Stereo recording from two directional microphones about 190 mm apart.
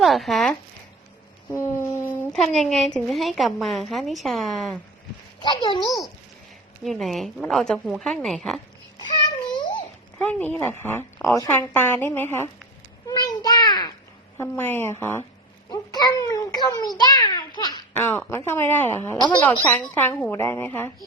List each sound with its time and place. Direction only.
0.0 s a woman's voice: centre (ahead or behind)
1.5 s a sound: 15° left (ahead or behind)
2.3 s a woman's voice: centre (ahead or behind)
5.4 s a child's voice: 25° left (ahead or behind)
6.8 s a woman's voice: centre (ahead or behind)
9.5 s babbling: 25° left (ahead or behind)
10.2 s a woman's voice: 10° left (ahead or behind)
18.0 s a woman's voice: 10° left (ahead or behind)